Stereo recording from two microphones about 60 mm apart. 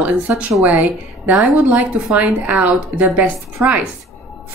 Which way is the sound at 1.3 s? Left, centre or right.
Right.